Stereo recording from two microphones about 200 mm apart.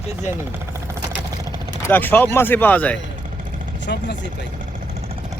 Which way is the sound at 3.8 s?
60° left (ahead or behind).